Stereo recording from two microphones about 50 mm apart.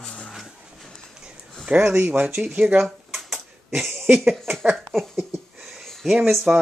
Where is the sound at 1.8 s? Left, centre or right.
Right.